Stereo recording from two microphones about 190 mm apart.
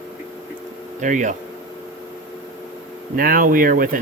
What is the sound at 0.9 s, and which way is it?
Speech, 40° right (ahead or behind).